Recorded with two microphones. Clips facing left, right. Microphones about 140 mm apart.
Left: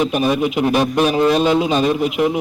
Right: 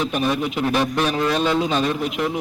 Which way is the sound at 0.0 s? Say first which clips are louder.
Left 5 dB; 10° left (ahead or behind).